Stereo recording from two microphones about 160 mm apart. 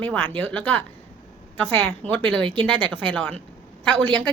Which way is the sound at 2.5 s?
30° right (ahead or behind).